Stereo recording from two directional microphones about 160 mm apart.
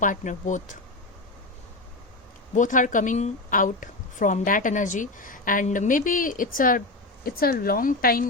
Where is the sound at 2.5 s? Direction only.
55° left (ahead or behind).